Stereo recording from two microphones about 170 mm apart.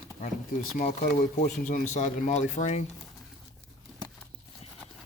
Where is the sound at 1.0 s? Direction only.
55° left (ahead or behind).